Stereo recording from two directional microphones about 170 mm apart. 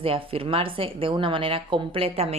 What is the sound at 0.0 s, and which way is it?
Speech, 35° right (ahead or behind).